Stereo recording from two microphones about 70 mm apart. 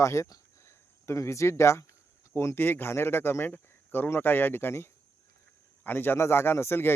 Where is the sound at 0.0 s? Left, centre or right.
Left.